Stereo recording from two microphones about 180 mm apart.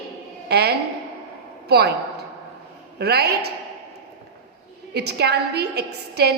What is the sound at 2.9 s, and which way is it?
Speech, 65° right (ahead or behind).